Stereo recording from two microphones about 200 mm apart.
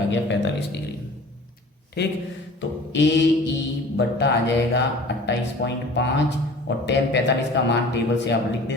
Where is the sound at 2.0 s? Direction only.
55° left (ahead or behind).